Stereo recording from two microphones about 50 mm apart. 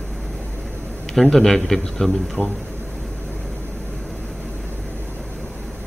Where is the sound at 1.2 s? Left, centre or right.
Centre.